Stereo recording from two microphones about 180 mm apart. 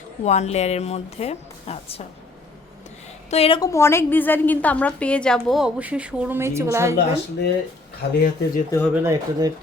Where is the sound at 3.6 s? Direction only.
15° left (ahead or behind); by 6.9 s 15° right (ahead or behind).